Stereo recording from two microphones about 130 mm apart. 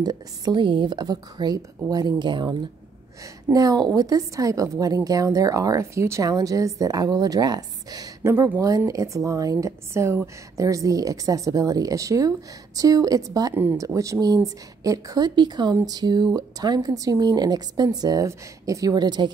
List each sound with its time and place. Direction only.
0.0 s a woman's voice: 30° right (ahead or behind)
3.5 s a woman's voice: 25° right (ahead or behind)